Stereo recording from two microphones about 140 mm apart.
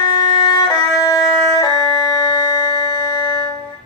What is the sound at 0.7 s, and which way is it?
Music, 25° left (ahead or behind).